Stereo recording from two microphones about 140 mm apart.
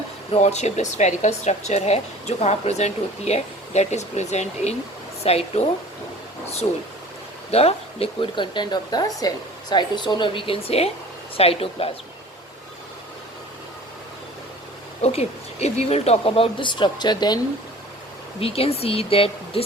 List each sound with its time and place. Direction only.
0.3 s speech: 55° left (ahead or behind)
7.5 s speech: 45° left (ahead or behind)
15.0 s speech: 50° left (ahead or behind); by 17.4 s 30° left (ahead or behind)
18.3 s speech: 45° left (ahead or behind)